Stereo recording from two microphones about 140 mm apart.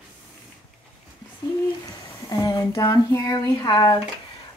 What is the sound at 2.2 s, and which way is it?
A woman's voice, 25° left (ahead or behind).